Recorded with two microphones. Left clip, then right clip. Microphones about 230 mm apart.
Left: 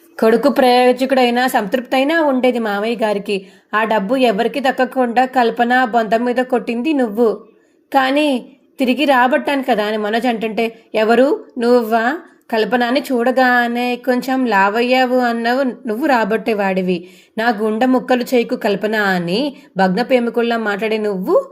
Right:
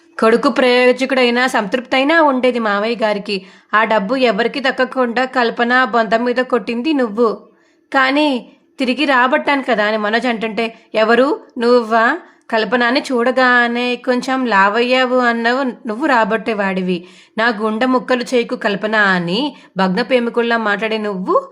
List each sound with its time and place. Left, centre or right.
0.2 s speech: centre